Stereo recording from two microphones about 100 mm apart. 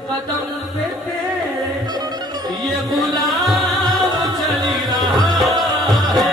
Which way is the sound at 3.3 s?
Centre (ahead or behind).